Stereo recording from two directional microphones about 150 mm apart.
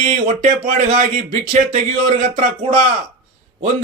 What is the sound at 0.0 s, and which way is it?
Speech, 50° right (ahead or behind).